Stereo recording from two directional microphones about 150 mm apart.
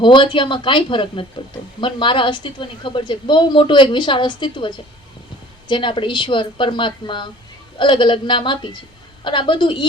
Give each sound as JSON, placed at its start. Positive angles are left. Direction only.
{"t": 0.0, "sound": "a woman's voice", "side_deg": 35}